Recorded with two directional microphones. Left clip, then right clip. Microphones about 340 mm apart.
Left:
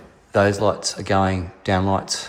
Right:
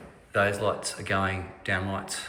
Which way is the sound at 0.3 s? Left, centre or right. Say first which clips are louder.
Left 7 dB; centre.